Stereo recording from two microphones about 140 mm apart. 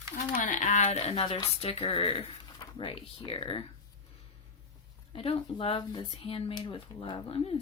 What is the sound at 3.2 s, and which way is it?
Speech, 40° left (ahead or behind).